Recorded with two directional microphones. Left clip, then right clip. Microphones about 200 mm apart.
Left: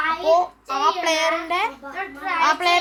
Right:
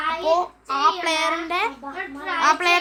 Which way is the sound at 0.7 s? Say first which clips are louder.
Right 1 dB; 5° right (ahead or behind).